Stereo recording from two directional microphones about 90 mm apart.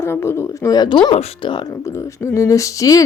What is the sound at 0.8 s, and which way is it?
Speech, 60° left (ahead or behind).